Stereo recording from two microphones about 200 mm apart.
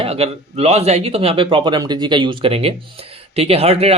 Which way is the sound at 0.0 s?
30° right (ahead or behind).